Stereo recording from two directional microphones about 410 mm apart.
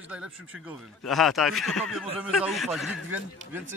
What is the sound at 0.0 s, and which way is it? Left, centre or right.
A man's voice, centre.